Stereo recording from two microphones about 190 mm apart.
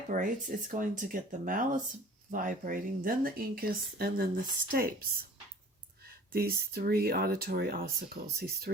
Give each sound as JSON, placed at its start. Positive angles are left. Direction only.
{"t": 0.1, "sound": "speech", "side_deg": -45}
{"t": 6.3, "sound": "speech", "side_deg": -55}